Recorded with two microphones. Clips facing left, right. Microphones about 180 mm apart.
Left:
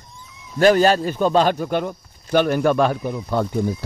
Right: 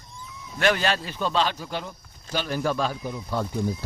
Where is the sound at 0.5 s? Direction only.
40° left (ahead or behind).